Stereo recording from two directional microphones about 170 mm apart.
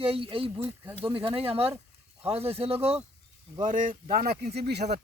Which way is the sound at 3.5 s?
50° right (ahead or behind).